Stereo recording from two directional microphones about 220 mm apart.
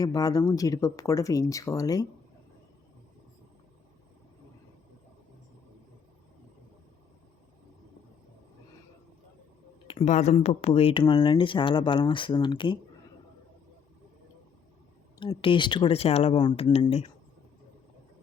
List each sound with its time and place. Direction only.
0.0 s speech: 15° left (ahead or behind)
9.8 s speech: 25° left (ahead or behind)
15.2 s speech: 20° left (ahead or behind)